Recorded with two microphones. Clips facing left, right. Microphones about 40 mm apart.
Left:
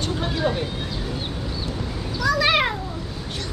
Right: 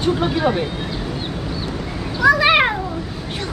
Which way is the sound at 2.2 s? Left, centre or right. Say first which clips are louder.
Right 6 dB; right.